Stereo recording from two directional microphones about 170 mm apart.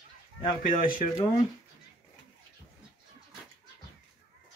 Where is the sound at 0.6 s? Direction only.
55° left (ahead or behind).